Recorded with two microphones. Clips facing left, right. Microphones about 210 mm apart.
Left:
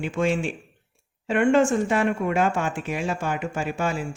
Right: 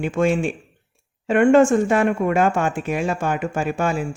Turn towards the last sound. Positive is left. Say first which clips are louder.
# right 4 dB
turn(degrees=-50)  # may be behind; listen again after turning